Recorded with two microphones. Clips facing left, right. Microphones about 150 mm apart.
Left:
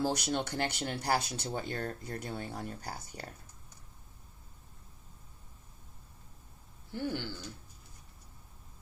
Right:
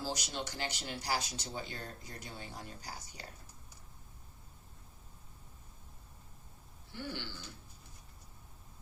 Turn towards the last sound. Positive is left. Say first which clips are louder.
# left 7 dB
turn(degrees=45)  # may be behind; listen again after turning